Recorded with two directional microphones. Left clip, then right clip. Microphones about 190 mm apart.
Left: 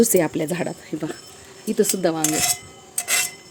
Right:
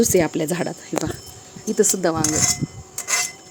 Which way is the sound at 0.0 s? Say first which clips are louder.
Even; 10° left (ahead or behind).